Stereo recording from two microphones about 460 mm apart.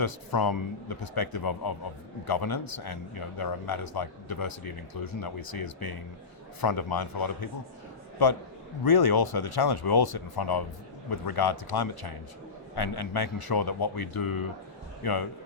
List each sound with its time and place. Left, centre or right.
0.0 s speech: left